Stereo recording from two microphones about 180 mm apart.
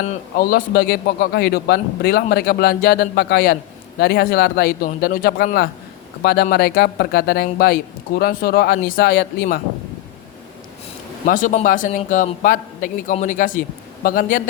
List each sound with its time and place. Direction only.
0.3 s speech: 60° left (ahead or behind)
11.3 s a man's voice: 45° left (ahead or behind)